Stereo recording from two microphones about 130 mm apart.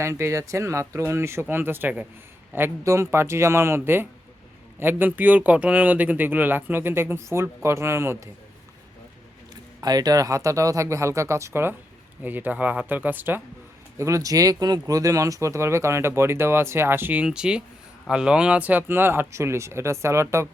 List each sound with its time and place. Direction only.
0.0 s speech: 20° right (ahead or behind)
9.8 s speech: 30° right (ahead or behind); by 13.4 s 15° right (ahead or behind)
14.0 s speech: 25° right (ahead or behind)